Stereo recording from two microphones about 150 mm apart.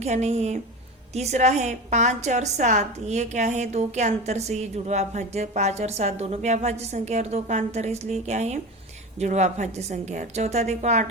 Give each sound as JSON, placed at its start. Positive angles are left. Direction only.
{"t": 0.0, "sound": "a woman's voice", "side_deg": -45}